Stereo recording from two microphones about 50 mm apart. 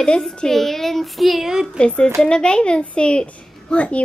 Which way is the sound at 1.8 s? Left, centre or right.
Left.